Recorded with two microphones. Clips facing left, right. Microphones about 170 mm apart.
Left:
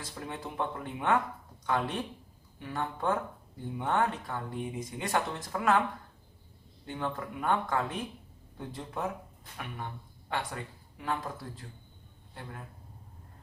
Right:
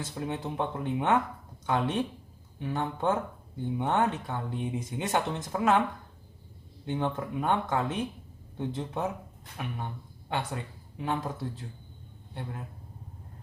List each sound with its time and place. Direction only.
0.0 s speech: 20° right (ahead or behind)
6.8 s speech: 20° right (ahead or behind)
10.2 s speech: 25° right (ahead or behind)